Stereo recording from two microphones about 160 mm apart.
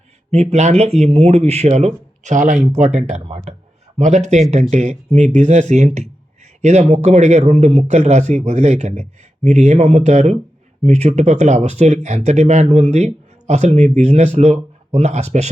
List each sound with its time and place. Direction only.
0.3 s speech: 45° right (ahead or behind)